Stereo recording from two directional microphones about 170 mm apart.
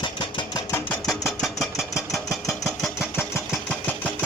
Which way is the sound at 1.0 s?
Centre (ahead or behind).